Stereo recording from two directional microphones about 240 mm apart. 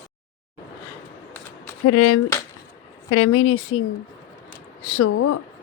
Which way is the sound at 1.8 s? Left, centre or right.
Left.